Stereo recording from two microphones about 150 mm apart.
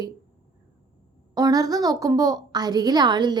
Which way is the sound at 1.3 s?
25° right (ahead or behind).